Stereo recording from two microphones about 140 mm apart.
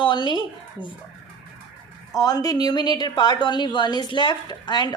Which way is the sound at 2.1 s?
25° left (ahead or behind).